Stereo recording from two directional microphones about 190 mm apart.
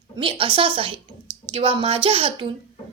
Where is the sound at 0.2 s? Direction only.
30° right (ahead or behind).